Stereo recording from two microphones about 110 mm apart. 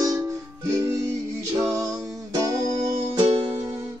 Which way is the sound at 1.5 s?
30° right (ahead or behind).